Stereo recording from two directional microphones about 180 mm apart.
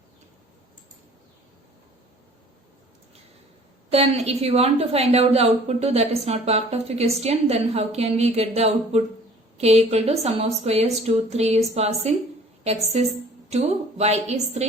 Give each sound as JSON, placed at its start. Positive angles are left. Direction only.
{"t": 3.9, "sound": "a woman's voice", "side_deg": -35}